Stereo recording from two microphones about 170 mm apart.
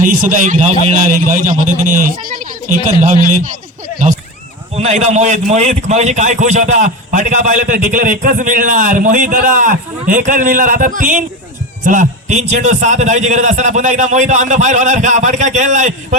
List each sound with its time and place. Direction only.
0.0 s a man's voice: 50° right (ahead or behind)
4.8 s a man's voice: 40° right (ahead or behind)